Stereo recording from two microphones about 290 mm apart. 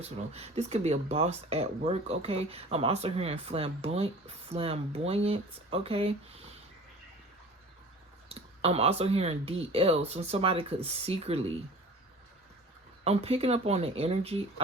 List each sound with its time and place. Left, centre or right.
0.0 s speech: right
8.3 s speech: right
13.1 s speech: right